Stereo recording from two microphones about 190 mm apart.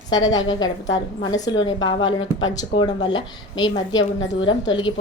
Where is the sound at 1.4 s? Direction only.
25° left (ahead or behind).